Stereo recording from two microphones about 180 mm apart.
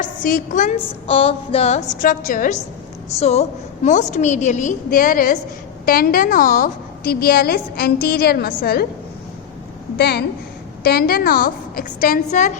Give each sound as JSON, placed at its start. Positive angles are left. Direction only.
{"t": 0.0, "sound": "a woman's voice", "side_deg": 50}
{"t": 1.0, "sound": "a woman's voice", "side_deg": 30}
{"t": 3.2, "sound": "a woman's voice", "side_deg": 35}
{"t": 10.0, "sound": "a woman's voice", "side_deg": 65}